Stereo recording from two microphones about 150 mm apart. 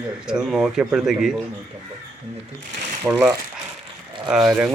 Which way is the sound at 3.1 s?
15° right (ahead or behind).